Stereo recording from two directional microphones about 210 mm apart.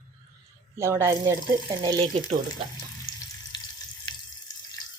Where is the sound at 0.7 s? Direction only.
10° right (ahead or behind).